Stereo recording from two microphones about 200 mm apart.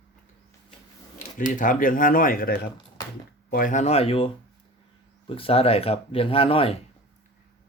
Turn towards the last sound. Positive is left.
turn(degrees=30)  # may be behind; listen again after turning